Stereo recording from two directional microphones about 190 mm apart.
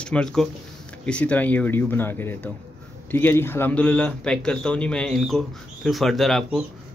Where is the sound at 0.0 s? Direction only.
5° left (ahead or behind).